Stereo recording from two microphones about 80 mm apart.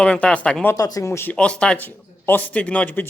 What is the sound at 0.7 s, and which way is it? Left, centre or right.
Speech, left.